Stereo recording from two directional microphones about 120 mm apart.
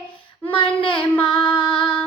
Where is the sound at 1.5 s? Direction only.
45° left (ahead or behind).